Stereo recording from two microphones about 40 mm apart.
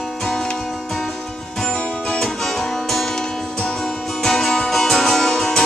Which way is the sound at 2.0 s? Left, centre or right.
Centre.